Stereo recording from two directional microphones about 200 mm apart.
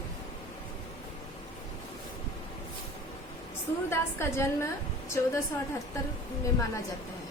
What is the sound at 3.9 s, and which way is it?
Speech, 10° left (ahead or behind).